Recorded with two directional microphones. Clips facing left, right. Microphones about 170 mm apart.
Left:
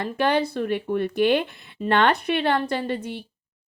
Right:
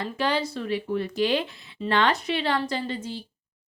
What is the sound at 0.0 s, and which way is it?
Speech, 55° left (ahead or behind).